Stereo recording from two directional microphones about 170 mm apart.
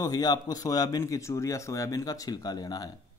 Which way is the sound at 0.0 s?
25° left (ahead or behind).